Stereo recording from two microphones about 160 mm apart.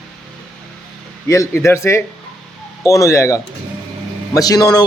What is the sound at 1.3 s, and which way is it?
Speech, 15° left (ahead or behind).